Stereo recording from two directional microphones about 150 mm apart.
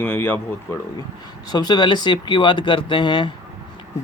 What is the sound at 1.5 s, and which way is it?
Speech, 25° left (ahead or behind).